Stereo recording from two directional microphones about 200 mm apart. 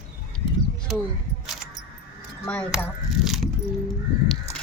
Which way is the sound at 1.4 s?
Centre (ahead or behind).